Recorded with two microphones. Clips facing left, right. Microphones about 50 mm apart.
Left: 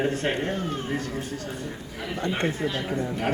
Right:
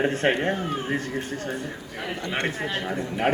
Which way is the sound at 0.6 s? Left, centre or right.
Centre.